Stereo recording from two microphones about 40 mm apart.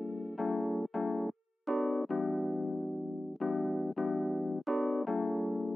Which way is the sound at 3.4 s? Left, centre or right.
Centre.